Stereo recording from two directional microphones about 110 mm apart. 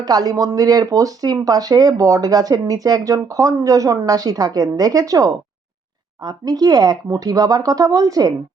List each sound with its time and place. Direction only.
0.0 s speech: 35° right (ahead or behind)